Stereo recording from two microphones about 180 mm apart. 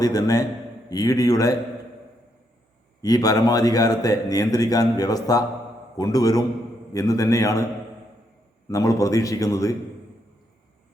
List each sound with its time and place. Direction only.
0.0 s a man's voice: 20° left (ahead or behind)
3.0 s a man's voice: 20° left (ahead or behind)
8.7 s a man's voice: 20° left (ahead or behind)